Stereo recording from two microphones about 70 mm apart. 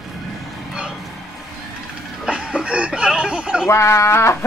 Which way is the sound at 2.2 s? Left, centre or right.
Centre.